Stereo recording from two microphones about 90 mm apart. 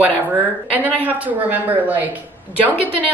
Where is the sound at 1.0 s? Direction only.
20° right (ahead or behind).